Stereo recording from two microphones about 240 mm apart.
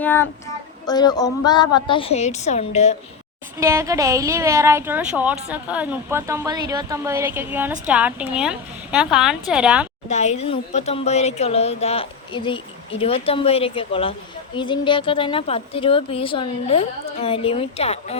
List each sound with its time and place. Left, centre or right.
0.0 s child singing: centre
0.9 s speech: centre
3.6 s a woman's voice: centre
10.1 s speech: left